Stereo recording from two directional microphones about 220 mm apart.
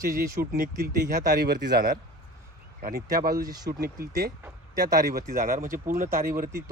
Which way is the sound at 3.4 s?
15° right (ahead or behind).